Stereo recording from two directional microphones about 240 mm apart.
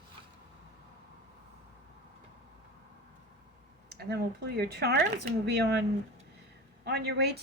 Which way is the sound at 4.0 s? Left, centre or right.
Right.